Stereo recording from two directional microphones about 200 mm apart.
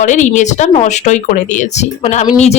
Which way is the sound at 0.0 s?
40° left (ahead or behind).